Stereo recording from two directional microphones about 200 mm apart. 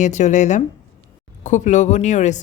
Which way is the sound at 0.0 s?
35° left (ahead or behind).